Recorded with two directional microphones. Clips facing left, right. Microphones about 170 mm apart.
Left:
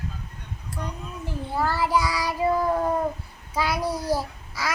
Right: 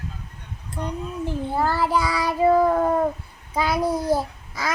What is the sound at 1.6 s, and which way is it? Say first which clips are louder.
Child singing: even; 55° right (ahead or behind).